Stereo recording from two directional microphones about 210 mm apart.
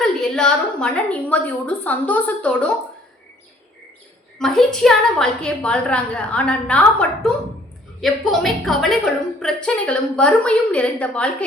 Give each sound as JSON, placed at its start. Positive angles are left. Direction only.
{"t": 0.0, "sound": "a woman's voice", "side_deg": 5}
{"t": 4.4, "sound": "a woman's voice", "side_deg": 0}